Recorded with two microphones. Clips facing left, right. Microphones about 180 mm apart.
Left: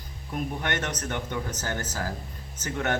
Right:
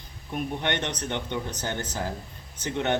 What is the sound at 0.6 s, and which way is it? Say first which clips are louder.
Speech: right 1 dB; 25° right (ahead or behind).